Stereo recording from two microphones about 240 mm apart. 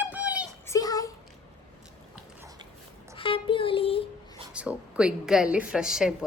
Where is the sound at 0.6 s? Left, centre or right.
Centre.